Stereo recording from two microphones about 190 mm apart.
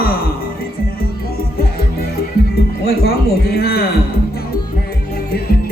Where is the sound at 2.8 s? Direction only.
55° left (ahead or behind).